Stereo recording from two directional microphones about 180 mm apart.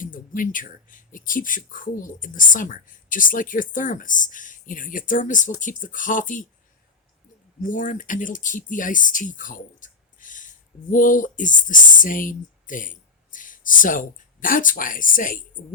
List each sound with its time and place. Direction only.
0.0 s speech: 50° left (ahead or behind)
7.6 s speech: 45° left (ahead or behind)